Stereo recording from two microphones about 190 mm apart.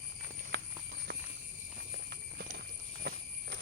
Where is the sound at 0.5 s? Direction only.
65° right (ahead or behind).